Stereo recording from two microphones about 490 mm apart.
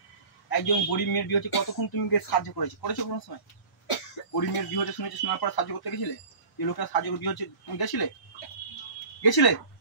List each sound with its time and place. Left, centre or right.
0.5 s speech: left
9.2 s speech: left